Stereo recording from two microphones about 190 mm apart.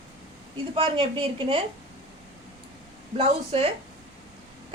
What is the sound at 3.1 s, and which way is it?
Speech, 30° right (ahead or behind).